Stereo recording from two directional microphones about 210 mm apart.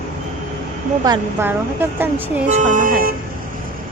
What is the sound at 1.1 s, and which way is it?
A woman's voice, 10° right (ahead or behind).